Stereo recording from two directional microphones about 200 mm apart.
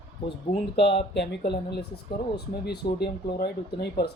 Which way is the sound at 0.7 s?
60° left (ahead or behind).